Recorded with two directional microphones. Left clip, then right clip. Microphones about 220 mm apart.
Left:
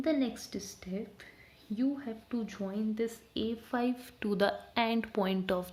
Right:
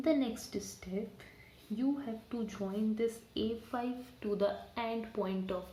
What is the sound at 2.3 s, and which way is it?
A woman's voice, 45° left (ahead or behind).